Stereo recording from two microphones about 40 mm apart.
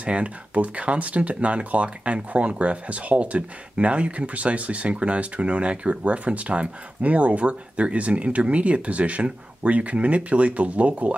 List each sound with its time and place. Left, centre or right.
0.0 s speech: right